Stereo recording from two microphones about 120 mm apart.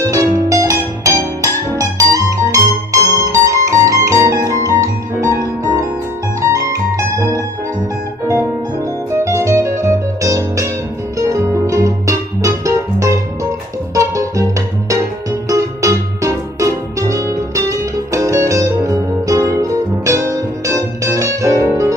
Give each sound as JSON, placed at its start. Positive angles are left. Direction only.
{"t": 0.0, "sound": "music", "side_deg": -25}
{"t": 9.1, "sound": "music", "side_deg": -25}